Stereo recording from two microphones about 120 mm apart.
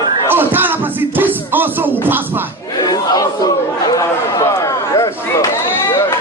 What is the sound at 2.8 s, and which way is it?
Battle cry, 30° left (ahead or behind).